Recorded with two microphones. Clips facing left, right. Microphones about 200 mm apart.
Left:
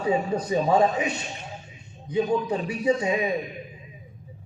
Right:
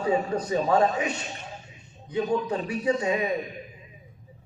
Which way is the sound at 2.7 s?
10° left (ahead or behind).